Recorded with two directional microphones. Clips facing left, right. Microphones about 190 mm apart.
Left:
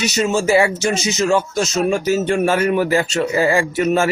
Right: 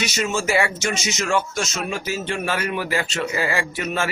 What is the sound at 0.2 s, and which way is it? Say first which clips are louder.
Speech: left 7 dB; 35° left (ahead or behind).